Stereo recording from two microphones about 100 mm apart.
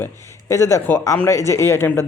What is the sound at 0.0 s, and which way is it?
Speech, 25° left (ahead or behind).